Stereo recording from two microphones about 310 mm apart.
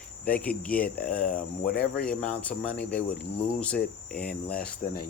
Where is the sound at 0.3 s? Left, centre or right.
Centre.